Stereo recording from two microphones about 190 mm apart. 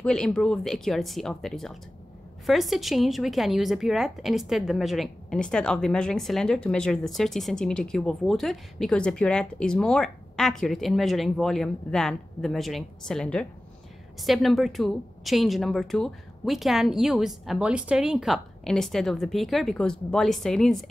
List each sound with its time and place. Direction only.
0.0 s speech: 5° left (ahead or behind)